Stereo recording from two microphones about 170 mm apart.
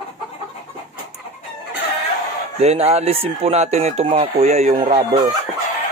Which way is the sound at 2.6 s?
40° right (ahead or behind).